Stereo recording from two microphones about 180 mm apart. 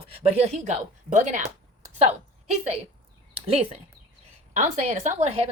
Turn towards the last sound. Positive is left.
turn(degrees=-40)  # may be behind; listen again after turning